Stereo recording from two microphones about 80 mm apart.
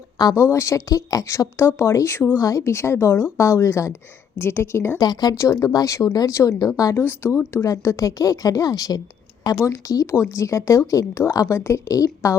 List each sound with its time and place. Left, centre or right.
0.2 s speech: left
0.5 s speech: left
2.4 s speech: left
4.9 s speech: left
5.4 s speech: left
7.0 s speech: left
9.6 s speech: left